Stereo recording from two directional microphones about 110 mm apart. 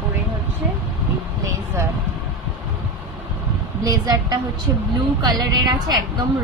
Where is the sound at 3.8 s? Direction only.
35° right (ahead or behind).